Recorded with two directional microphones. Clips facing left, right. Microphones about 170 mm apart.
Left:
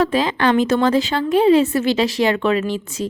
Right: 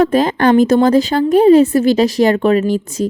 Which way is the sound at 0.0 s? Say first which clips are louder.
Right 5 dB; 45° right (ahead or behind).